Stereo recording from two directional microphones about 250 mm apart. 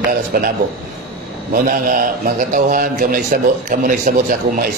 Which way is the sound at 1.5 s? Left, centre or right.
Right.